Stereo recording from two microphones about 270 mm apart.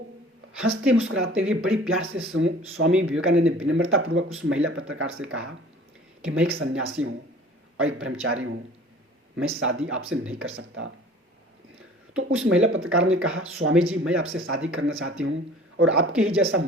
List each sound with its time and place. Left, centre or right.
0.6 s speech: right
9.6 s speech: right
12.1 s speech: right